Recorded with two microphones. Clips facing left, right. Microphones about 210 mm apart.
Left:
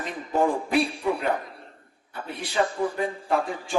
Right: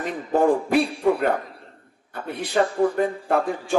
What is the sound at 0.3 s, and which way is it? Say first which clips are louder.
Speech: right 5 dB; 55° right (ahead or behind).